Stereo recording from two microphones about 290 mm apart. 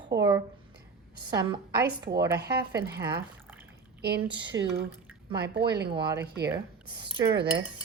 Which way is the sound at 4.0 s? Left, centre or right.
Right.